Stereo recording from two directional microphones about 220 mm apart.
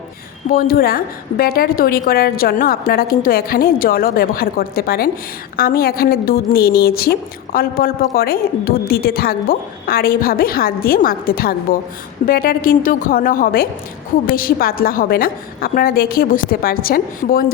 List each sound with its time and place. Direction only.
0.5 s a woman's voice: 45° left (ahead or behind)